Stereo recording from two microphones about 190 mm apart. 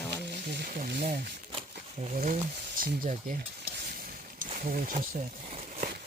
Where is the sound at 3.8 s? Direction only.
50° right (ahead or behind).